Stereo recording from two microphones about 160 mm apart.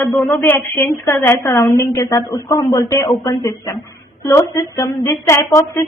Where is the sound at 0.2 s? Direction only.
10° left (ahead or behind).